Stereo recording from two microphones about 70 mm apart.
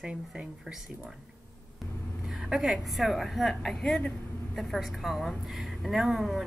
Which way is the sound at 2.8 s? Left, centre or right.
Centre.